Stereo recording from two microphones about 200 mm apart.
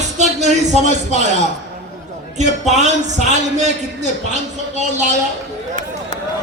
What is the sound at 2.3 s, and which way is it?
Speech, 35° right (ahead or behind).